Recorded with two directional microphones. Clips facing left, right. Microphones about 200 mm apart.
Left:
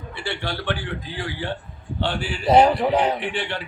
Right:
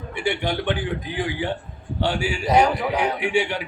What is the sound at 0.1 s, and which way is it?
A man's voice, 15° right (ahead or behind).